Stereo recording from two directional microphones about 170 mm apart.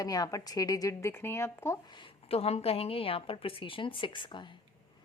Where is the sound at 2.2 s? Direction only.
35° left (ahead or behind).